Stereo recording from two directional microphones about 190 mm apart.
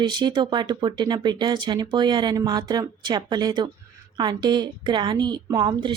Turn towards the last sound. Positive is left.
turn(degrees=-25)  # may be behind; listen again after turning